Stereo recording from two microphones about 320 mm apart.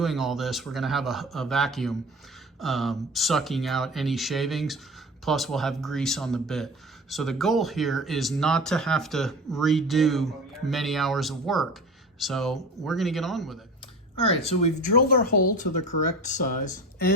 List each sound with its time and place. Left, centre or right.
0.0 s speech: centre
14.2 s speech: centre